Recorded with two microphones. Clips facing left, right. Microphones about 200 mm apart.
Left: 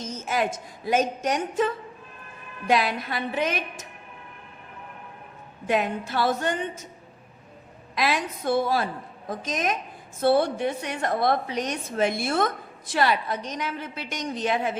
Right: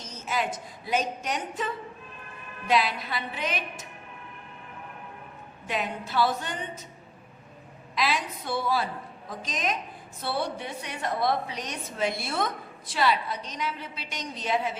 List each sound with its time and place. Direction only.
0.0 s a woman's voice: 50° left (ahead or behind)
2.6 s a woman's voice: 50° left (ahead or behind)
5.6 s a woman's voice: 50° left (ahead or behind)
7.9 s a woman's voice: 50° left (ahead or behind)